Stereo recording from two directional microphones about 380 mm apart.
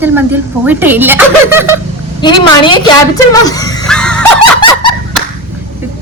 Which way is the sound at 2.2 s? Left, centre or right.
Centre.